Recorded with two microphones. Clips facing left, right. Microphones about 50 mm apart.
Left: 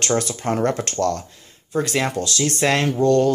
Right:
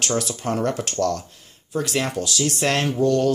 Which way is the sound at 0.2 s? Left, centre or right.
Left.